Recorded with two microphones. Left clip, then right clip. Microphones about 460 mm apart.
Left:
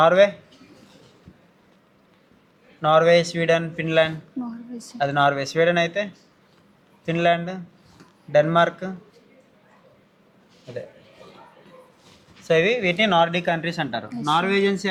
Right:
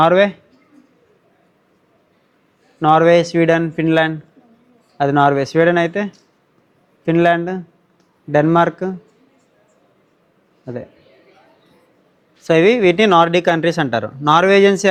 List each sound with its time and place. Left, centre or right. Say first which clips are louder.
0.0 s speech: right 3 dB; right
2.8 s speech: right 5 dB; right
12.5 s speech: right 7 dB; right